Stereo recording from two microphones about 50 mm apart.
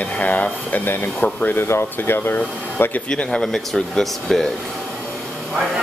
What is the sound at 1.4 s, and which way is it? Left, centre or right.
Speech, left.